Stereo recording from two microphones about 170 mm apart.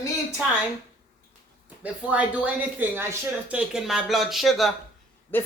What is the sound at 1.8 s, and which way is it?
Speech, 10° right (ahead or behind).